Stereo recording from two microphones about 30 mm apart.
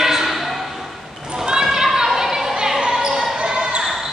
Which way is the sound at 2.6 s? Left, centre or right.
Right.